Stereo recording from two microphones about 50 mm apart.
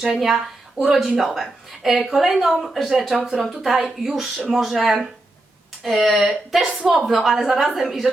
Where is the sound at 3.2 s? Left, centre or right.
Centre.